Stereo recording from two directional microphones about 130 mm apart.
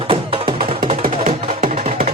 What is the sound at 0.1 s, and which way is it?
Music, 45° right (ahead or behind).